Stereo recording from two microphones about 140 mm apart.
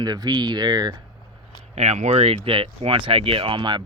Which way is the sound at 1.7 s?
50° right (ahead or behind).